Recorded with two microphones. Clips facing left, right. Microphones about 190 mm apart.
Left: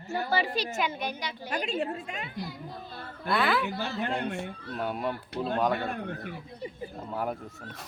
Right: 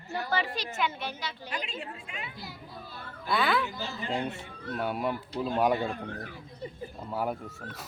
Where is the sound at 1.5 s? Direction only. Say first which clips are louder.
Left 10 dB; 40° left (ahead or behind).